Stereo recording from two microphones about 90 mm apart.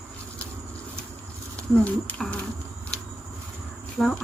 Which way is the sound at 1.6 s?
15° left (ahead or behind).